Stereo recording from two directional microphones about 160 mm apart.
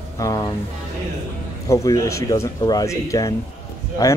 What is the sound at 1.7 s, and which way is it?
Speech, 20° left (ahead or behind).